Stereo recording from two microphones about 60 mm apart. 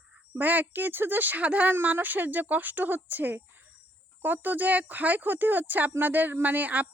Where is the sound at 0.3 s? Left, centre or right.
Right.